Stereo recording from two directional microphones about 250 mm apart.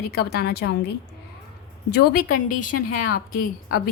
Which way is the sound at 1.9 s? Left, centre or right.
Left.